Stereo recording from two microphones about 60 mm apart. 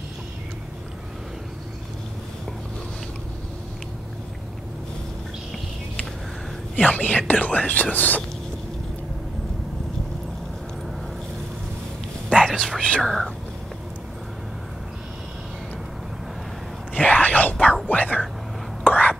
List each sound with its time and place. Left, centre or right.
6.7 s speech: left
12.4 s speech: centre
16.9 s whispering: left
17.8 s speech: left
18.9 s whispering: left